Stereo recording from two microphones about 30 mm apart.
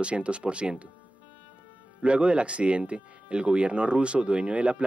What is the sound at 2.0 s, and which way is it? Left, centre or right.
Speech, right.